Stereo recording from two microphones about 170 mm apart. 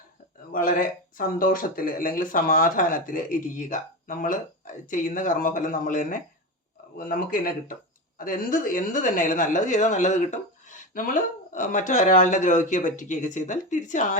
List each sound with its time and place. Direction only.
0.5 s a woman's voice: 55° left (ahead or behind)